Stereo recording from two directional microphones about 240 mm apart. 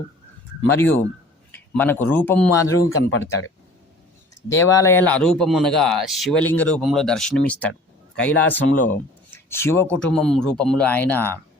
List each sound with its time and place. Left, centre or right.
0.7 s speech: centre
2.7 s speech: left
4.4 s speech: centre